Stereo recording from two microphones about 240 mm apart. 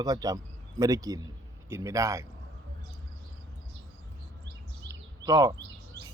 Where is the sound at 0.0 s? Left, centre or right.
Centre.